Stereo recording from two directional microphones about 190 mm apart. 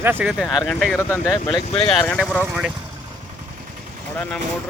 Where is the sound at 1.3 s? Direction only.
Centre (ahead or behind).